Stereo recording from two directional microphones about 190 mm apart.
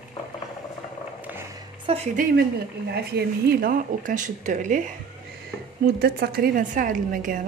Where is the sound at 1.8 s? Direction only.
30° right (ahead or behind).